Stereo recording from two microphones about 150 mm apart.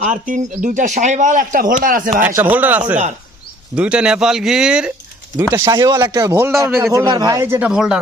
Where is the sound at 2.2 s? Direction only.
10° right (ahead or behind).